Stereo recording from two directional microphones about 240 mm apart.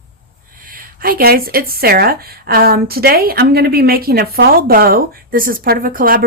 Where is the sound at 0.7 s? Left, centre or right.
Right.